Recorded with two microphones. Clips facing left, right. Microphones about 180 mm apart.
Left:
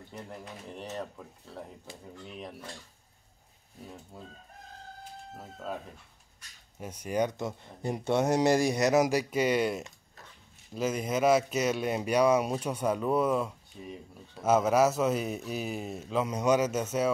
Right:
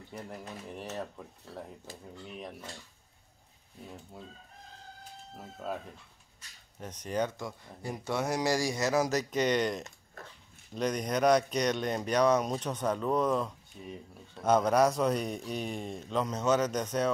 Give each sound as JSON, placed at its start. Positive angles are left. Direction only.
{"t": 0.1, "sound": "speech", "side_deg": -5}
{"t": 6.8, "sound": "speech", "side_deg": 10}
{"t": 10.2, "sound": "dog", "side_deg": -55}
{"t": 10.7, "sound": "speech", "side_deg": 5}